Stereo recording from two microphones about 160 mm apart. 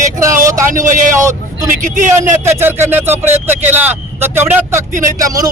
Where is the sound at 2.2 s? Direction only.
15° right (ahead or behind).